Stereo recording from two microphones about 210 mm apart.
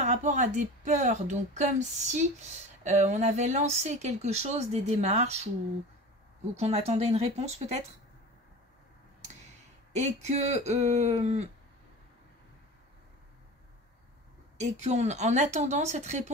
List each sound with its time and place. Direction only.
0.0 s speech: 35° right (ahead or behind)
6.5 s speech: 30° right (ahead or behind)
9.9 s speech: 35° right (ahead or behind)
14.6 s speech: 35° right (ahead or behind)